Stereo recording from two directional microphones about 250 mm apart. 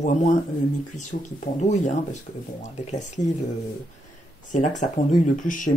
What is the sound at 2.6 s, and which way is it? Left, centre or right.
Speech, left.